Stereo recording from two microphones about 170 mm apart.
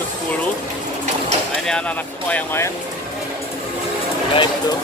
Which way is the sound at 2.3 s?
15° left (ahead or behind).